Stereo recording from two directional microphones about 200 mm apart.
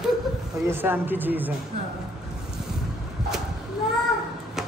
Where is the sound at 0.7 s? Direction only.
10° right (ahead or behind).